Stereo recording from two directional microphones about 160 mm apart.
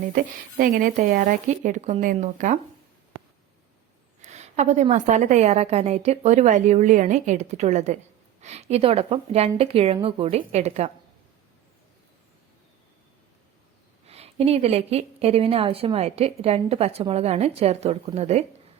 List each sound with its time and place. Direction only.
0.6 s a woman's voice: 60° right (ahead or behind)
4.2 s a woman's voice: 45° right (ahead or behind)
14.1 s a woman's voice: 40° right (ahead or behind)